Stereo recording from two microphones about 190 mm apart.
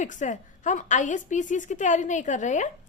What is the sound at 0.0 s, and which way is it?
A woman's voice, 40° left (ahead or behind).